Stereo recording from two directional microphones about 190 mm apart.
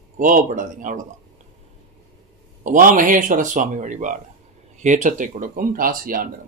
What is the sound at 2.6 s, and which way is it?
Speech, 45° right (ahead or behind).